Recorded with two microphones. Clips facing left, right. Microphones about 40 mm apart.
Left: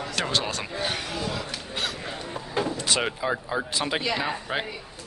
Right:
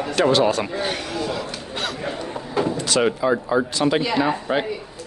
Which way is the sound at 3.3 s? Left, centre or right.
Centre.